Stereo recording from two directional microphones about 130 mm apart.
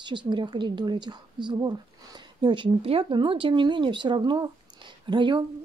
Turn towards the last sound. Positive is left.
turn(degrees=-40)  # may be behind; listen again after turning